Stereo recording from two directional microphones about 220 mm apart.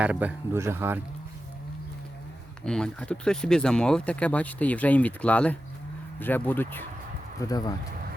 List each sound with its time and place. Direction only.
0.0 s speech: 5° right (ahead or behind)
2.6 s speech: 5° left (ahead or behind)